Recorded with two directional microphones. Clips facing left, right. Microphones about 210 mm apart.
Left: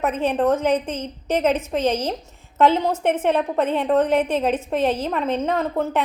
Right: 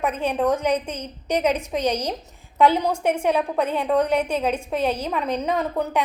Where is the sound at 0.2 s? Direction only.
5° left (ahead or behind).